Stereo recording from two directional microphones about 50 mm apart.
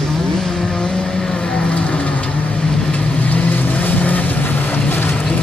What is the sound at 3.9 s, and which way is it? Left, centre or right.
Vehicle, left.